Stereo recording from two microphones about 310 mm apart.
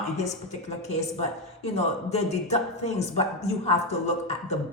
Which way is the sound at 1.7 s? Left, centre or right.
Left.